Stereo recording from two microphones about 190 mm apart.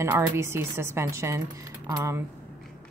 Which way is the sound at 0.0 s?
15° right (ahead or behind).